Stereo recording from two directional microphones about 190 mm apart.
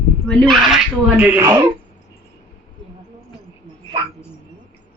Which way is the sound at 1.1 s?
10° right (ahead or behind).